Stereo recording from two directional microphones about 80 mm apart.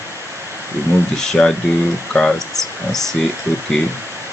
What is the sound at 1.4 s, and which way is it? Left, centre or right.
Speech, centre.